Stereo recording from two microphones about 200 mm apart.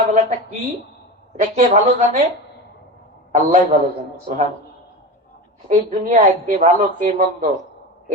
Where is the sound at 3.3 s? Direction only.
35° right (ahead or behind).